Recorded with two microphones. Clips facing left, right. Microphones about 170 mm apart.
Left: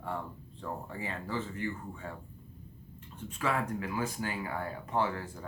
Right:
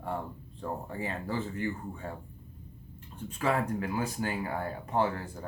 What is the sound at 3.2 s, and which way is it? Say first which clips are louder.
Speech: right 3 dB; 35° right (ahead or behind).